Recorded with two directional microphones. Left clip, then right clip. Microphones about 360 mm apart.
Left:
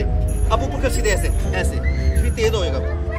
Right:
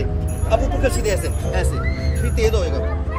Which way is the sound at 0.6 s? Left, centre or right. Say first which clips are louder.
Right 1 dB; centre.